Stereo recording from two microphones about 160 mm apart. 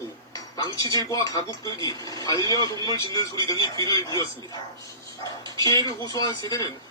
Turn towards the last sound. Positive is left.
turn(degrees=20)  # may be behind; listen again after turning